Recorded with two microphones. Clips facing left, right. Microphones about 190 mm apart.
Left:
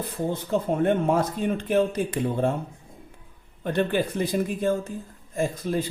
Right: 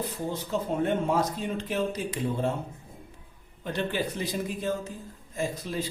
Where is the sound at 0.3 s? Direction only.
55° left (ahead or behind).